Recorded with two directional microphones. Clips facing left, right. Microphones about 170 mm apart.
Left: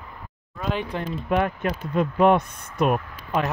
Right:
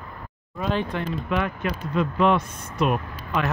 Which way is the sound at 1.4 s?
50° left (ahead or behind).